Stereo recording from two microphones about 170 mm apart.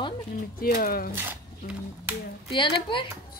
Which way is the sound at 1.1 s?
10° right (ahead or behind).